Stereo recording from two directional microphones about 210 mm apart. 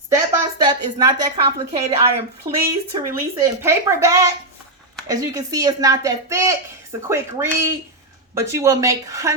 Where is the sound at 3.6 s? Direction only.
15° right (ahead or behind).